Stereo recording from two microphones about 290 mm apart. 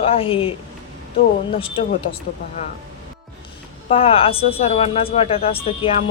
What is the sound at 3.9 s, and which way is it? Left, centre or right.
Speech, centre.